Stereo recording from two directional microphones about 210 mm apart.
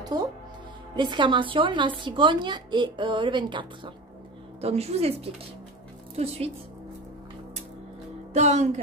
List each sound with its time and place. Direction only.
0.0 s a woman's voice: 20° right (ahead or behind)
8.3 s speech: 35° right (ahead or behind)